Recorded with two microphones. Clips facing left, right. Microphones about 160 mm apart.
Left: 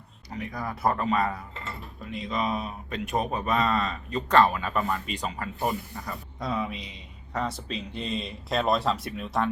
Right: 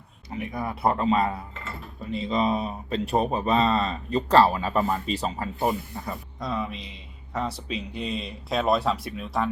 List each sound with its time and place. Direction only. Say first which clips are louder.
0.3 s speech: right 3 dB; 25° right (ahead or behind)
1.6 s mechanisms: right 2 dB; centre (ahead or behind)
2.1 s speech: right 5 dB; 25° right (ahead or behind)
5.9 s speech: right 3 dB; 20° right (ahead or behind)
6.4 s speech: even; centre (ahead or behind)